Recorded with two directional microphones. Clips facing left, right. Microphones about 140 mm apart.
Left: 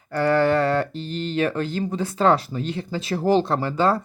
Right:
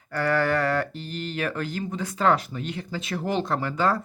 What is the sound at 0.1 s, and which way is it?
Speech, 25° left (ahead or behind).